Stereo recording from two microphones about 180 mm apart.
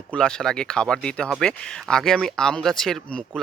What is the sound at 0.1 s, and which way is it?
Speech, 5° left (ahead or behind).